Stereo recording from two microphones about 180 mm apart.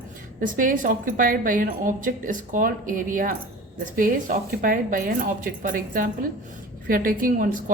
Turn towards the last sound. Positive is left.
turn(degrees=-50)  # may be behind; listen again after turning